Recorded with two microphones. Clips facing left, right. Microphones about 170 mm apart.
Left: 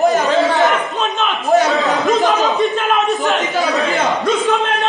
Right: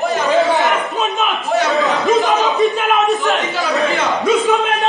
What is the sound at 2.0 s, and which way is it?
A man's voice, centre (ahead or behind).